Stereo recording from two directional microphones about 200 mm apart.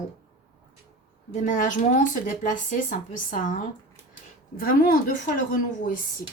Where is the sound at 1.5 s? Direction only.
40° left (ahead or behind).